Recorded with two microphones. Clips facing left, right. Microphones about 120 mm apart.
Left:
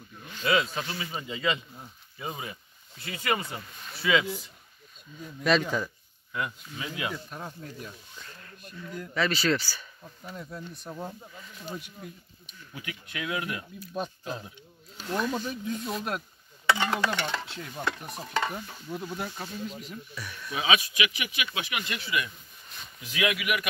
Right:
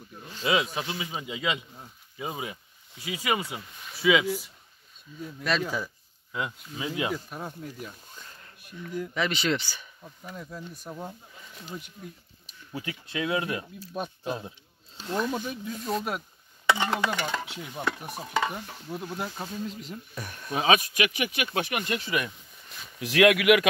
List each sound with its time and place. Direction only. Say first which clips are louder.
0.2 s speech: even; 25° right (ahead or behind); by 5.9 s 5° right (ahead or behind)
6.3 s speech: right 1 dB; 20° right (ahead or behind)
7.2 s speech: right 2 dB; 5° right (ahead or behind)
10.0 s speech: even; centre (ahead or behind)
12.7 s speech: right 5 dB; 30° right (ahead or behind)
13.9 s speech: right 2 dB; 5° right (ahead or behind)
16.6 s stir: right 1 dB; 15° right (ahead or behind)
17.1 s speech: right 1 dB; 10° right (ahead or behind)
19.1 s speech: right 2 dB; 25° right (ahead or behind)
20.2 s speech: right 4 dB; 45° right (ahead or behind)
22.9 s speech: right 9 dB; 75° right (ahead or behind)